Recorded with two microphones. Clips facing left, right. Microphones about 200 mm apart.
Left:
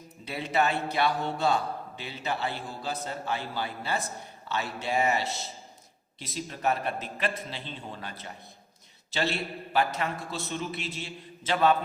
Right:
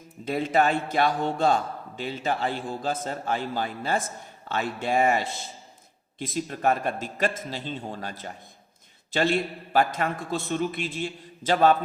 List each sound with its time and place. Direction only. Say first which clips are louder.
0.3 s a man's voice: right 5 dB; 45° right (ahead or behind)
9.1 s a man's voice: right 6 dB; 50° right (ahead or behind)